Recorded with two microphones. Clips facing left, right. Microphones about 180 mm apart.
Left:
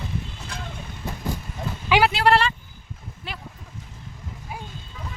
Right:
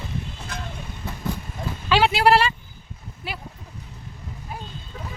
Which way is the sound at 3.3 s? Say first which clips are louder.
Right 3 dB; 5° right (ahead or behind).